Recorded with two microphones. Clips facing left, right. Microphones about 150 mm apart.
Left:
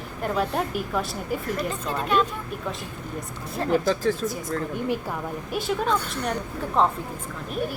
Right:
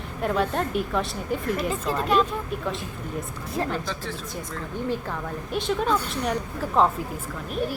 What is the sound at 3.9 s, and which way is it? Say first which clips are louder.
Speech: left 9 dB; 45° left (ahead or behind).